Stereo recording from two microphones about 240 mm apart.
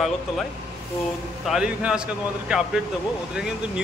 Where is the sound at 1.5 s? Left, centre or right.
Centre.